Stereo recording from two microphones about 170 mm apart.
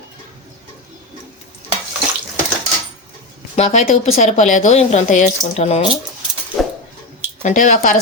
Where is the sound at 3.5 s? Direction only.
40° left (ahead or behind).